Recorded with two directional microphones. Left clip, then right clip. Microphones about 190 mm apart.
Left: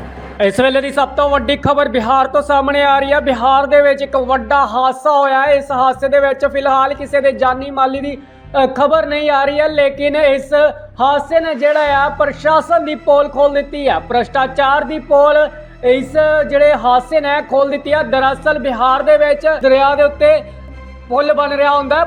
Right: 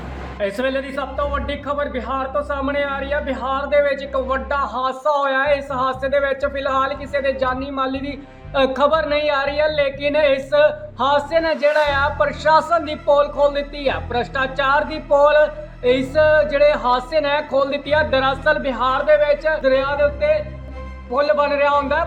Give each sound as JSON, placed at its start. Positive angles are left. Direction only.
{"t": 0.3, "sound": "speech", "side_deg": 30}
{"t": 19.6, "sound": "speech", "side_deg": 30}
{"t": 21.1, "sound": "speech", "side_deg": 20}